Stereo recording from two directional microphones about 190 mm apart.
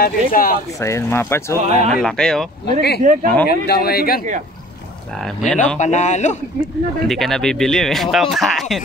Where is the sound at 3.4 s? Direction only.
55° left (ahead or behind).